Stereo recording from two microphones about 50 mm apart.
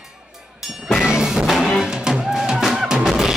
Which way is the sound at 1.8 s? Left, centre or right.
Centre.